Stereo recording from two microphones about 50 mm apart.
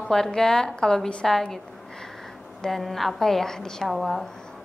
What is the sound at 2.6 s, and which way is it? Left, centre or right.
A woman's voice, centre.